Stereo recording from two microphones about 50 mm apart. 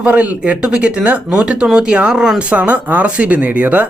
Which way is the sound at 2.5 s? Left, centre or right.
Right.